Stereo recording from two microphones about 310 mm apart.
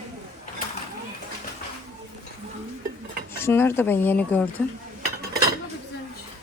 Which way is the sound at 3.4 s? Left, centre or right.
Centre.